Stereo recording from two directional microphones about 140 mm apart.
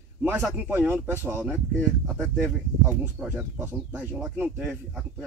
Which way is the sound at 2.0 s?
5° left (ahead or behind).